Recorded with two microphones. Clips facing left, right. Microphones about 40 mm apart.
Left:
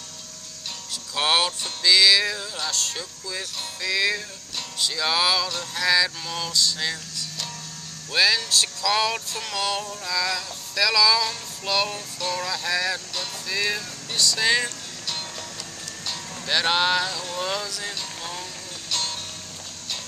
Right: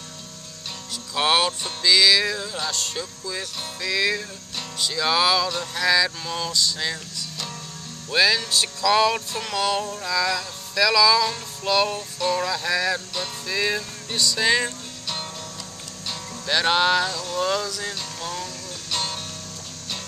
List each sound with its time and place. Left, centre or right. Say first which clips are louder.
1.1 s music: right 2 dB; centre
16.1 s speech: right 1 dB; centre
17.4 s music: right 5 dB; centre